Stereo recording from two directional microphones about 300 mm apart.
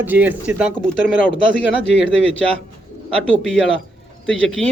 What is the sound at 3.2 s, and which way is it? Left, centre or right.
A man's voice, centre.